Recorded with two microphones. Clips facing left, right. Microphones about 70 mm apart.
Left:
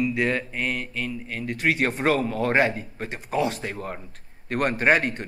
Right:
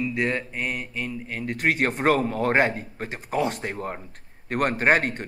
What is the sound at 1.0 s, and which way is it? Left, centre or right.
Speech, right.